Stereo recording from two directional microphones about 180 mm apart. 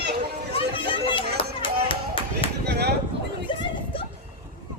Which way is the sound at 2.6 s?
65° right (ahead or behind).